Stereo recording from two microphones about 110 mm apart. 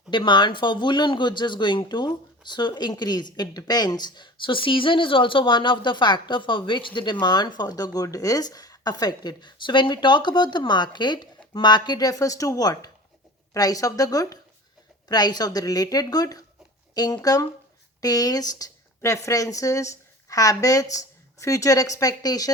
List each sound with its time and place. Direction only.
0.1 s speech: 45° left (ahead or behind)